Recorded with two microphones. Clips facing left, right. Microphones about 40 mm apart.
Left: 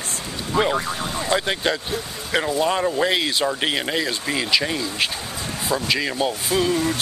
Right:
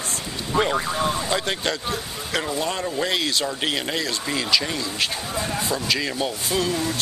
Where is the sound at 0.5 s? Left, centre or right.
Centre.